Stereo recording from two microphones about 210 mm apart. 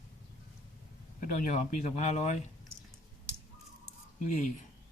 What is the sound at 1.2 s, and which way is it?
Speech, 35° left (ahead or behind).